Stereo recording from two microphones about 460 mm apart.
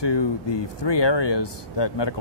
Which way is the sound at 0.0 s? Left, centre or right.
Left.